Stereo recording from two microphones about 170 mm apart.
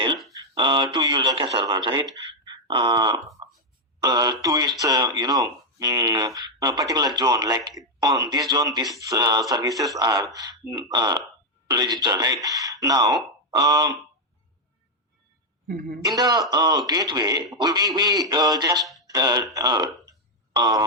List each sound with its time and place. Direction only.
0.3 s a man's voice: 30° right (ahead or behind)
2.4 s wail: 25° right (ahead or behind)
4.0 s speech: 20° right (ahead or behind)
15.6 s a woman's voice: 60° right (ahead or behind)
16.0 s speech: 20° right (ahead or behind)